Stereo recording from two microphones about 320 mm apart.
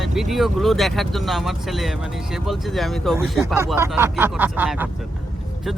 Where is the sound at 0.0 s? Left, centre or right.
Centre.